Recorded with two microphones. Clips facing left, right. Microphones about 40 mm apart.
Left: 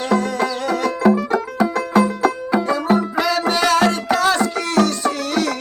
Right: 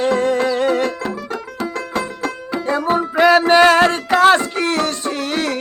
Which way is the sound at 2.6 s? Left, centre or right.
Right.